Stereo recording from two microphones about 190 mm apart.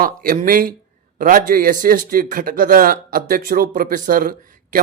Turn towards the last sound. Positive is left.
turn(degrees=-45)  # may be behind; listen again after turning